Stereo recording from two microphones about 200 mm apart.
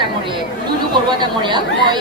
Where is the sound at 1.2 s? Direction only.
25° right (ahead or behind).